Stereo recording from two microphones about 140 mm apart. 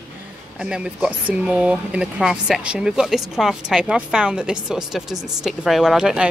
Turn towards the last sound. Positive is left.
turn(degrees=-5)  # may be behind; listen again after turning